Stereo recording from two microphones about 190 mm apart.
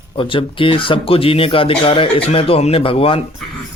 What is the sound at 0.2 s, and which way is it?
Speech, 25° left (ahead or behind).